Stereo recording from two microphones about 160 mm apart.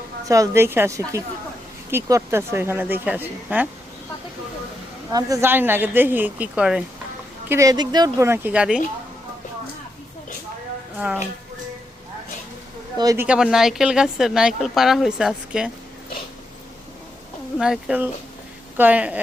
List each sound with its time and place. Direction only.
0.3 s a woman's voice: 20° right (ahead or behind)
5.1 s a woman's voice: 20° right (ahead or behind)
7.4 s a woman's voice: 15° right (ahead or behind)
10.9 s a woman's voice: 10° right (ahead or behind)
13.0 s a woman's voice: 20° right (ahead or behind)
13.2 s speech: 5° right (ahead or behind)
17.6 s a woman's voice: 5° right (ahead or behind)